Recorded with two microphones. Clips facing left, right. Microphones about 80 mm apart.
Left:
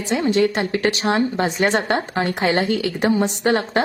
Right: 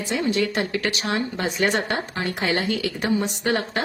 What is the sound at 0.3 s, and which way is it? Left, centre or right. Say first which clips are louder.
A woman's voice: left 6 dB; left.